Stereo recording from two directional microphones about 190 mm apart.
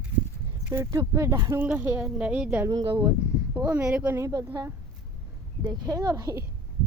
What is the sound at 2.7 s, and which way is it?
Speech, 20° right (ahead or behind).